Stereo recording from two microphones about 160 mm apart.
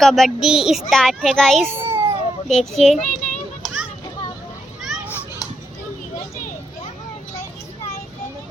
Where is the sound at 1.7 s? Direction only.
35° right (ahead or behind).